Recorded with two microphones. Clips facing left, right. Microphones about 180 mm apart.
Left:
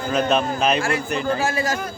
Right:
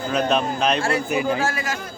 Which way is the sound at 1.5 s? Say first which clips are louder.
Left 5 dB; 40° left (ahead or behind).